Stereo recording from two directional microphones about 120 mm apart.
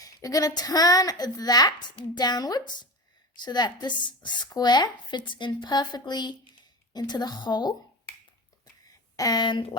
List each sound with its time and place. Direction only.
0.0 s speech: 30° left (ahead or behind)
9.1 s speech: 30° left (ahead or behind)